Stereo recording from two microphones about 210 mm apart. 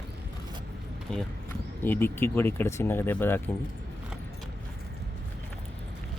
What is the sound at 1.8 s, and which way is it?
Speech, 10° left (ahead or behind).